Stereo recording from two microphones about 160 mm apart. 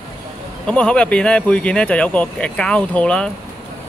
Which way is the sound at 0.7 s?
5° left (ahead or behind).